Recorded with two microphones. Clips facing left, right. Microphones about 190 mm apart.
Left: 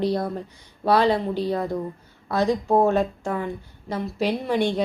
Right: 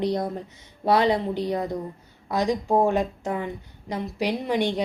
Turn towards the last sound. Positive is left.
turn(degrees=-15)  # may be behind; listen again after turning